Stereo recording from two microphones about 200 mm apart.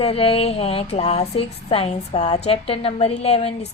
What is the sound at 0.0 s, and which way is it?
A woman's voice, 30° left (ahead or behind).